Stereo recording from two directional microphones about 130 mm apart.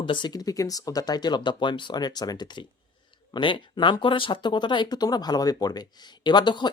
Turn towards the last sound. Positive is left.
turn(degrees=35)  # may be behind; listen again after turning